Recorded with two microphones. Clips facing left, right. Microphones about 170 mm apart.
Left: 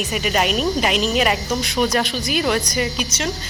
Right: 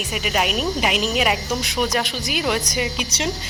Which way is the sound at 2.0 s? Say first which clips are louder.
Left 3 dB; 15° right (ahead or behind).